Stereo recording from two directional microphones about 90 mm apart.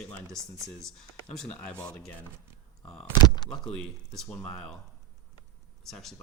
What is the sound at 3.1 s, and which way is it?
Speech, 50° left (ahead or behind).